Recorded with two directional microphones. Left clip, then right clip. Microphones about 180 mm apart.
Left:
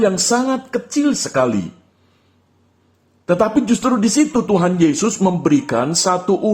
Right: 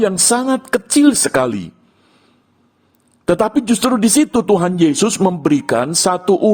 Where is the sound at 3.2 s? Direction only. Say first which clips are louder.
Right 1 dB; 60° right (ahead or behind).